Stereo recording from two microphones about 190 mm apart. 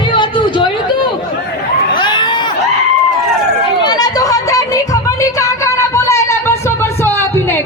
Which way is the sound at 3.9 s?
20° left (ahead or behind).